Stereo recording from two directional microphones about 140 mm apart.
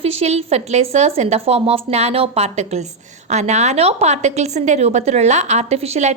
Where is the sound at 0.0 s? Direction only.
45° right (ahead or behind).